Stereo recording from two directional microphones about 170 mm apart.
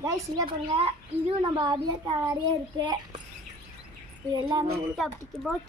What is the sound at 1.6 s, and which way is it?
Speech, 25° right (ahead or behind).